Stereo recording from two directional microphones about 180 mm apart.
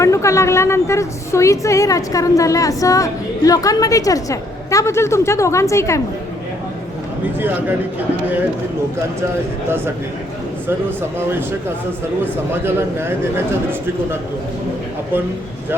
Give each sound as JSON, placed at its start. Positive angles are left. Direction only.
{"t": 0.0, "sound": "a woman's voice", "side_deg": 15}
{"t": 9.6, "sound": "speech", "side_deg": -10}